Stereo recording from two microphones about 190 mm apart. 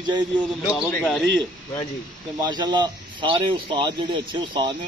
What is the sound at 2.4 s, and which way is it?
Speech, 25° right (ahead or behind).